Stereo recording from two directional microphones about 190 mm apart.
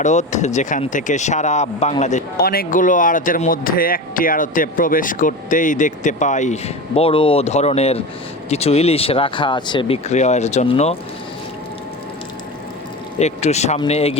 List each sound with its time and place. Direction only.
0.0 s speech: 40° left (ahead or behind)
2.4 s speech: 50° left (ahead or behind); by 10.9 s 35° left (ahead or behind)
13.1 s speech: 35° left (ahead or behind)